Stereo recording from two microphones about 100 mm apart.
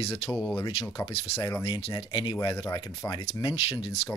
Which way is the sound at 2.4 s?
40° left (ahead or behind).